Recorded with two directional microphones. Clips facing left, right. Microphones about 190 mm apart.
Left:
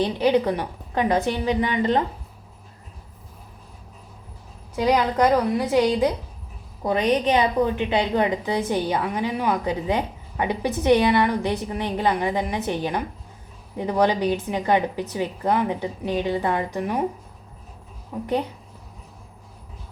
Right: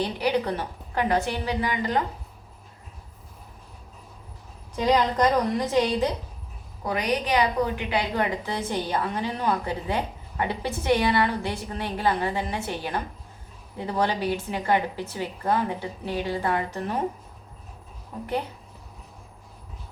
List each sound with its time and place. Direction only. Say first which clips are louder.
0.2 s a woman's voice: left 6 dB; 20° left (ahead or behind)
4.8 s a woman's voice: left 2 dB; 10° left (ahead or behind)
6.8 s a woman's voice: left 6 dB; 25° left (ahead or behind)
18.1 s a woman's voice: left 5 dB; 10° left (ahead or behind)